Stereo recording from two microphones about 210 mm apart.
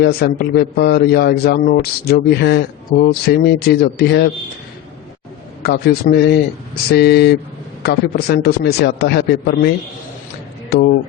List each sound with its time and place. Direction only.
0.0 s a man's voice: 50° left (ahead or behind)
5.6 s a man's voice: 50° left (ahead or behind)